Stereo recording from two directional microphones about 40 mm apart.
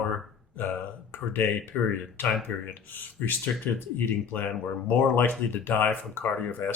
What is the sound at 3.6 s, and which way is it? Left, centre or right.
Speech, left.